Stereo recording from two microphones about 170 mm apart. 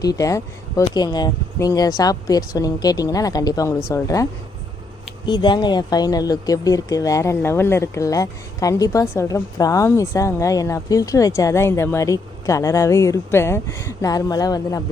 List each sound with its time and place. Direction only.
0.0 s speech: 20° left (ahead or behind)